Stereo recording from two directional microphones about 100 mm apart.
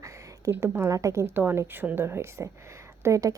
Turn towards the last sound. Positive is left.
turn(degrees=-35)  # may be behind; listen again after turning